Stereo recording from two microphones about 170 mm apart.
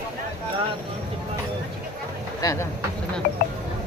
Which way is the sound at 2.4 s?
20° left (ahead or behind).